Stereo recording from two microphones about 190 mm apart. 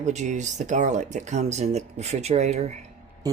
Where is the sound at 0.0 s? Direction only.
40° right (ahead or behind).